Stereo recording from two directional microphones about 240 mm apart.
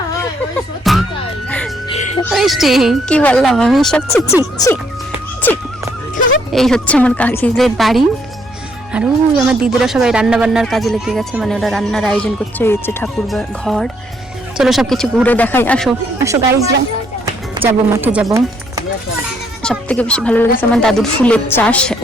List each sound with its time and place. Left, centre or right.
0.9 s music: centre
1.9 s music: left
2.3 s speech: centre
4.5 s speech: centre
6.5 s speech: centre
16.1 s speech: centre
19.6 s speech: centre